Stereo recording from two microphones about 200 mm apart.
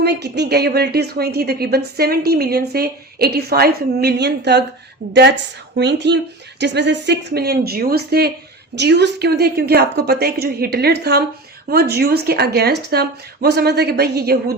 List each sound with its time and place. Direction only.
0.0 s a woman's voice: 55° right (ahead or behind)